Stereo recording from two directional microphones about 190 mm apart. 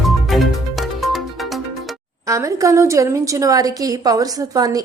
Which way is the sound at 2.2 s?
15° right (ahead or behind).